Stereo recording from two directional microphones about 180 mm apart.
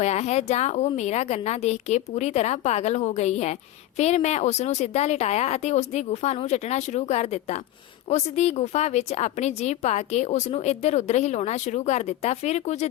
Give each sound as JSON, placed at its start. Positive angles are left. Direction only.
{"t": 0.0, "sound": "a woman's voice", "side_deg": 40}